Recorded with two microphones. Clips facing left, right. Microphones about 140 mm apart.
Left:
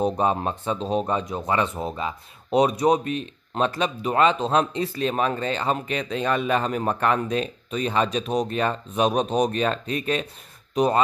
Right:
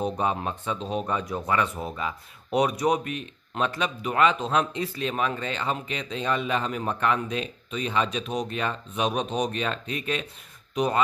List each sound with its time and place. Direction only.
0.0 s speech: 35° left (ahead or behind)